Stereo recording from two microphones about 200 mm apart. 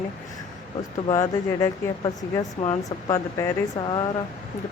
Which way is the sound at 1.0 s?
15° left (ahead or behind).